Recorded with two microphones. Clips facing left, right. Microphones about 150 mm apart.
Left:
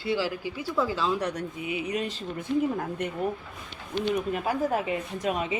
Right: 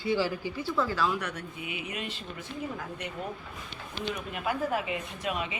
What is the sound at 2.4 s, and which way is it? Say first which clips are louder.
Speech: left 12 dB; 55° left (ahead or behind).